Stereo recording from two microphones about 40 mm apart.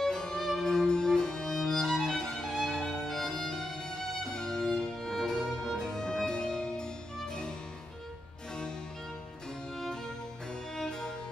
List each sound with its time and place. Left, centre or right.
0.0 s music: centre
10.8 s music: centre